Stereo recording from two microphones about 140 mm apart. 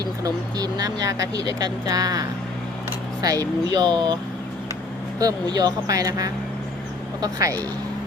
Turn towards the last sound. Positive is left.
turn(degrees=-25)  # may be behind; listen again after turning